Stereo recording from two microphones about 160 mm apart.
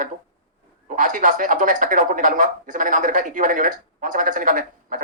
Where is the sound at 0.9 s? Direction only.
55° right (ahead or behind).